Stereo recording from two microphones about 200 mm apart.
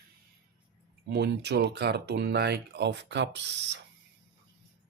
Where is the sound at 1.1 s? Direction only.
60° right (ahead or behind).